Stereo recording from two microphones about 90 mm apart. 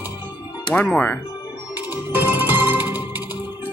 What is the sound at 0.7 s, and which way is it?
Speech, 20° left (ahead or behind).